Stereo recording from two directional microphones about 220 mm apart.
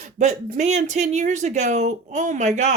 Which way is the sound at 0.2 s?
35° right (ahead or behind).